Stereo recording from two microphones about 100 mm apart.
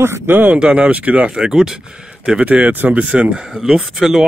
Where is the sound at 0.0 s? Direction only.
20° right (ahead or behind).